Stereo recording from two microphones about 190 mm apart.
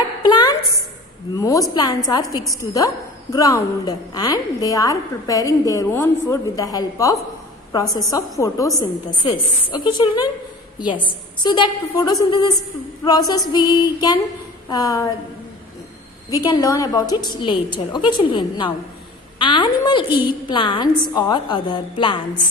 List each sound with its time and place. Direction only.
0.2 s a sound: 20° left (ahead or behind)
1.4 s a woman's voice: 20° left (ahead or behind)
11.4 s a woman's voice: 25° left (ahead or behind)
16.3 s a woman's voice: 20° left (ahead or behind)